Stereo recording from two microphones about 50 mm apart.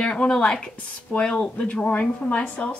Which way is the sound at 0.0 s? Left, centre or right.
Centre.